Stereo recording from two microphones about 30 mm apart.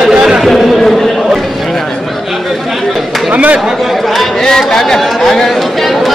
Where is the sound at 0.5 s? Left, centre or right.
Centre.